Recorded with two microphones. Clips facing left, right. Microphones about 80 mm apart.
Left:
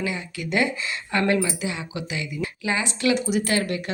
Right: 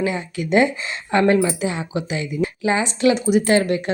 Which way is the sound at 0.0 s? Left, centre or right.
Right.